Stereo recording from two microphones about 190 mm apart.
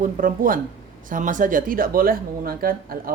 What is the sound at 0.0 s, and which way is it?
Speech, 45° right (ahead or behind).